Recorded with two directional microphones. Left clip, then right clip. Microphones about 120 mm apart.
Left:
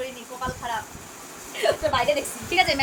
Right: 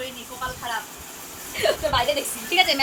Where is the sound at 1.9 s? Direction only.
10° right (ahead or behind).